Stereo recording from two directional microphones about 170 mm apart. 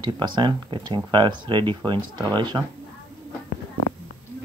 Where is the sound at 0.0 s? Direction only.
25° right (ahead or behind).